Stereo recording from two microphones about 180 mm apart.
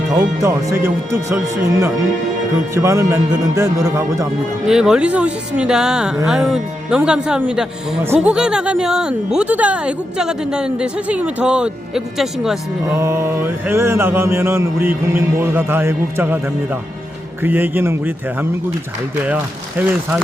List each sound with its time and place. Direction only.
0.4 s mantra: 15° right (ahead or behind)
4.6 s speech: 5° right (ahead or behind)
13.0 s mantra: 15° right (ahead or behind)
17.4 s mantra: 10° right (ahead or behind)